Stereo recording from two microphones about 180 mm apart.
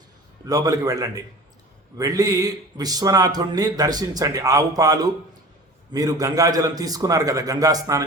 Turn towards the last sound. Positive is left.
turn(degrees=-20)  # may be behind; listen again after turning